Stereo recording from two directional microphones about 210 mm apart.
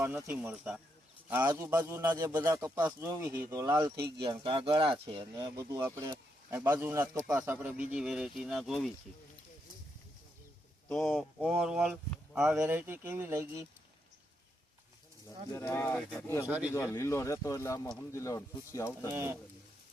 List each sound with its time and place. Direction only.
0.0 s speech: 10° right (ahead or behind)
10.8 s speech: centre (ahead or behind)
15.5 s speech: 10° left (ahead or behind)
16.1 s speech: 15° left (ahead or behind)
16.5 s speech: 5° right (ahead or behind)
16.7 s speech: 15° left (ahead or behind)
19.1 s speech: 10° right (ahead or behind)